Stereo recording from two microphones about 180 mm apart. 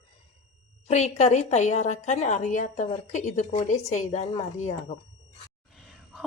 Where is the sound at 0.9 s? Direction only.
40° left (ahead or behind).